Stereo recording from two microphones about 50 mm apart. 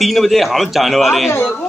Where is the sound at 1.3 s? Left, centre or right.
Left.